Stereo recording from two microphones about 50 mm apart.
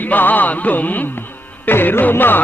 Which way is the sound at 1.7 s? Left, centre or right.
Left.